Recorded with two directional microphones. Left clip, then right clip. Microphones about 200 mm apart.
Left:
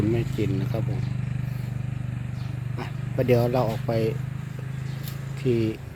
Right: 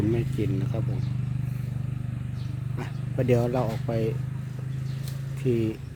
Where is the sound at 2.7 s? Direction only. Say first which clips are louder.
Left 3 dB; centre (ahead or behind).